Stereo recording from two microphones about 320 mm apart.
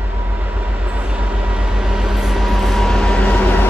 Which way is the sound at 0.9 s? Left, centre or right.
Centre.